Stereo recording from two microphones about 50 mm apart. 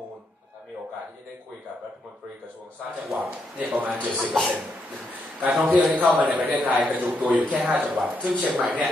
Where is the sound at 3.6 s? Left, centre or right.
Right.